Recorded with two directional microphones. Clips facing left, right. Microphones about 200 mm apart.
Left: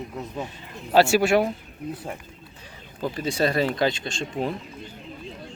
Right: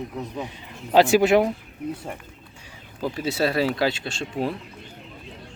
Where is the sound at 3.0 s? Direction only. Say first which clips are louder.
Even; 5° right (ahead or behind).